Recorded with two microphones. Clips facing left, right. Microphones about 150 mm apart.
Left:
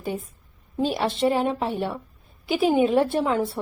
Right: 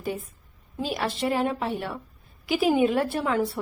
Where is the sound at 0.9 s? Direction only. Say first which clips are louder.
Left 3 dB; 25° left (ahead or behind).